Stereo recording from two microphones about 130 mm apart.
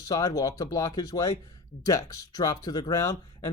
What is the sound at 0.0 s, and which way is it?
Speech, 25° left (ahead or behind).